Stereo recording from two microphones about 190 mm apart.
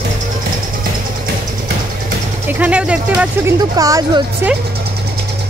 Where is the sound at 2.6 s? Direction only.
5° right (ahead or behind).